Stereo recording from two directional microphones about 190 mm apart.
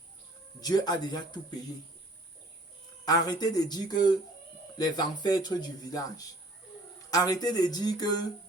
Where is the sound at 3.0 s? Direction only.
20° left (ahead or behind).